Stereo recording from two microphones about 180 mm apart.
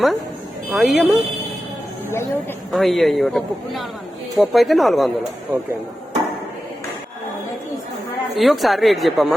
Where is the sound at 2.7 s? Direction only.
Centre (ahead or behind).